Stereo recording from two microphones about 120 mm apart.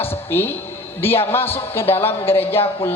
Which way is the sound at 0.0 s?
20° left (ahead or behind).